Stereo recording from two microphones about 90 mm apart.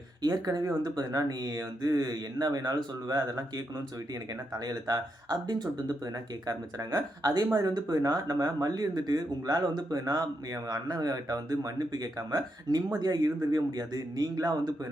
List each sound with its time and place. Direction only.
0.2 s speech: 45° right (ahead or behind)